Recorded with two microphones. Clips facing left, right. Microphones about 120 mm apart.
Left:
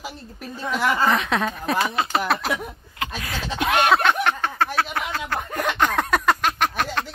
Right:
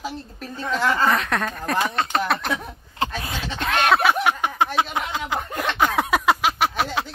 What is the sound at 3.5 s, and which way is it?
Speech, 10° left (ahead or behind).